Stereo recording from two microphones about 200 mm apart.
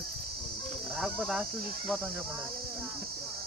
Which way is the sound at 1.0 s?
Centre (ahead or behind).